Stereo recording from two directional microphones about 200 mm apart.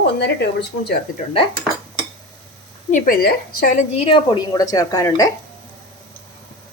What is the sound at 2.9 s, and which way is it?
A woman's voice, 40° left (ahead or behind).